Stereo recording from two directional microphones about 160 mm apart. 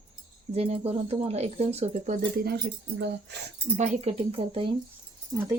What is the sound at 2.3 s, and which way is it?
Speech, 80° right.